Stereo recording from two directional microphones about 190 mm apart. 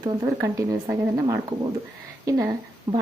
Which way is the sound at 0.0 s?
15° right (ahead or behind).